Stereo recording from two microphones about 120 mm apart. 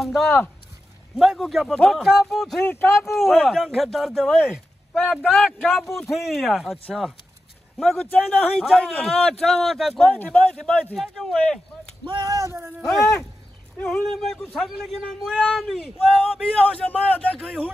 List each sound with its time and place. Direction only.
0.0 s a man's voice: centre (ahead or behind)
2.7 s speech: 15° left (ahead or behind)
3.1 s a man's voice: centre (ahead or behind)
10.1 s speech: 10° left (ahead or behind)
12.0 s speech: 45° right (ahead or behind)
12.3 s speech: 25° right (ahead or behind)
12.8 s a man's voice: 5° left (ahead or behind)